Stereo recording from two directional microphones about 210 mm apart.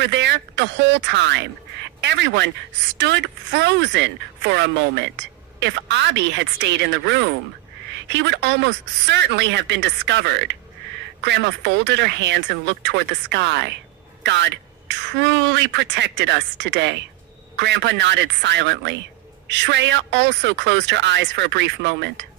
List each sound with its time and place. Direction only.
0.0 s speech: 55° right (ahead or behind)